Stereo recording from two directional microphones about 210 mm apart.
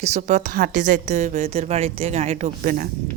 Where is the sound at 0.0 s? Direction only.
35° right (ahead or behind).